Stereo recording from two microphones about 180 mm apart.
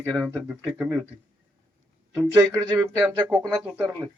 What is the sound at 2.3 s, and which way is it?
Speech, 15° right (ahead or behind).